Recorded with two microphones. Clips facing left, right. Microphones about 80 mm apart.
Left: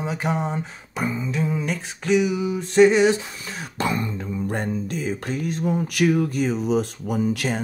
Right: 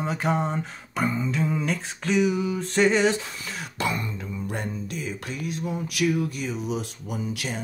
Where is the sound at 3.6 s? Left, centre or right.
Left.